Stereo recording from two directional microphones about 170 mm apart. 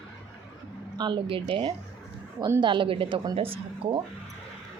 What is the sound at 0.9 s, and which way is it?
A woman's voice, 30° right (ahead or behind).